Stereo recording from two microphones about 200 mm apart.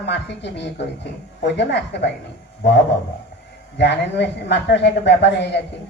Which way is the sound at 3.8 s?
60° left (ahead or behind).